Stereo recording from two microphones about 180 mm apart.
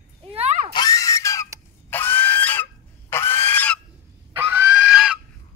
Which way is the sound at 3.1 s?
15° left (ahead or behind).